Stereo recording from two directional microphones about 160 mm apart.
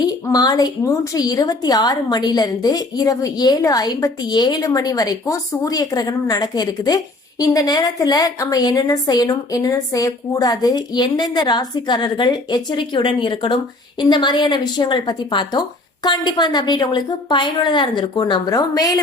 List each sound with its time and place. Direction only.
0.0 s a woman's voice: 25° left (ahead or behind)